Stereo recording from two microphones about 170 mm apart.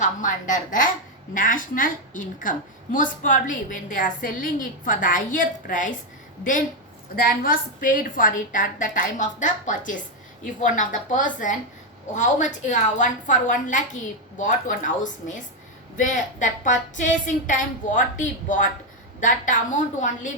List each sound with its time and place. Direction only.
0.0 s a woman's voice: 50° left (ahead or behind)
7.2 s a woman's voice: 55° left (ahead or behind)